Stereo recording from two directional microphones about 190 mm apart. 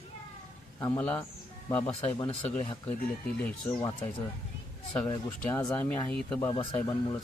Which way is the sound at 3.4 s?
5° left (ahead or behind).